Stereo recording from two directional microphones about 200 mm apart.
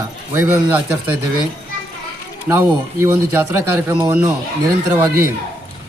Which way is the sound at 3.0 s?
15° right (ahead or behind).